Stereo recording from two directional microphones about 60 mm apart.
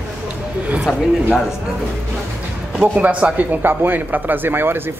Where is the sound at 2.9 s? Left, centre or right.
Right.